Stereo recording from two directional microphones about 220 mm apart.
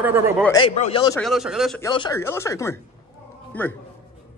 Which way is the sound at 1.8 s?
15° left (ahead or behind).